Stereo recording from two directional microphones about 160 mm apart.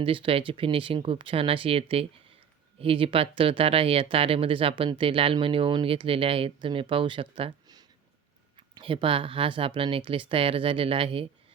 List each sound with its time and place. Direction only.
0.0 s speech: 35° right (ahead or behind)